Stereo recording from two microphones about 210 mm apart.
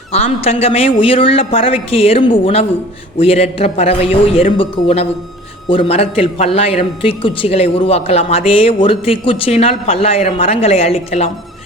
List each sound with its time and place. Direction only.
0.1 s a man's voice: 30° left (ahead or behind)